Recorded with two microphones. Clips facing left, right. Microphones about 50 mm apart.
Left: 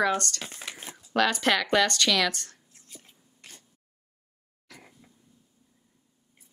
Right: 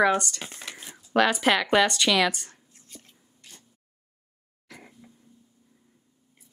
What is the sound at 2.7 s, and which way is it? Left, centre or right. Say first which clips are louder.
Whispering: right 2 dB; centre.